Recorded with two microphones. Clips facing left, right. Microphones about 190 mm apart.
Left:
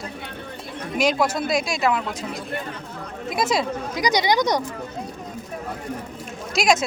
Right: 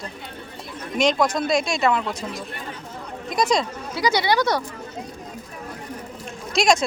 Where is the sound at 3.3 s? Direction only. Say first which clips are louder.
Right 1 dB; 5° left (ahead or behind).